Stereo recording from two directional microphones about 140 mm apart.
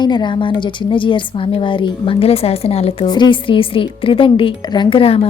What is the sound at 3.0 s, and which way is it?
A woman's voice, 30° left (ahead or behind).